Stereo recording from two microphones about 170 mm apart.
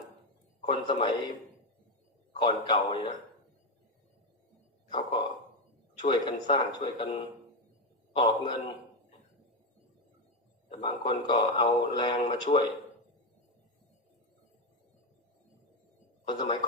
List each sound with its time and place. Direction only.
0.6 s speech: 30° left (ahead or behind)
2.3 s speech: 25° left (ahead or behind)
4.9 s speech: 25° left (ahead or behind)
10.7 s speech: 30° left (ahead or behind)
16.3 s speech: 25° left (ahead or behind)